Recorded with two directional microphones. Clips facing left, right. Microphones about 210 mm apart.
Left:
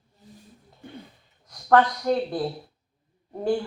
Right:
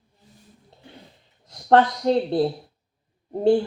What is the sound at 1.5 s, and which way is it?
Speech, 25° right (ahead or behind).